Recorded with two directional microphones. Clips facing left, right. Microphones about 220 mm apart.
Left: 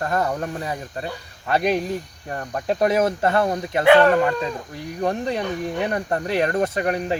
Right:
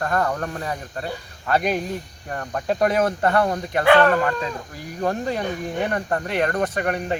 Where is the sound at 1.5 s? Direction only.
Centre (ahead or behind).